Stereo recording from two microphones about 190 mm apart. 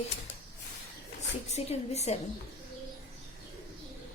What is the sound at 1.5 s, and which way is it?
Speech, 35° left (ahead or behind).